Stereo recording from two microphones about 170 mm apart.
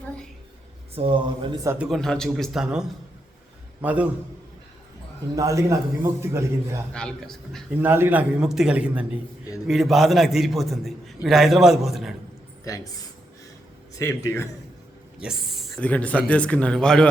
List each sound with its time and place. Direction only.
0.9 s speech: 35° right (ahead or behind)
1.6 s a man's voice: 15° right (ahead or behind)
1.9 s a man's voice: 5° left (ahead or behind)
5.3 s a man's voice: 20° right (ahead or behind)
6.9 s a man's voice: 5° left (ahead or behind)
7.8 s a man's voice: 10° right (ahead or behind)
12.6 s a man's voice: 20° left (ahead or behind)
15.2 s a man's voice: centre (ahead or behind)